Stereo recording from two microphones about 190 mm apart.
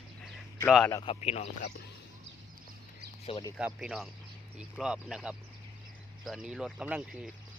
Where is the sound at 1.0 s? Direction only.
30° left (ahead or behind).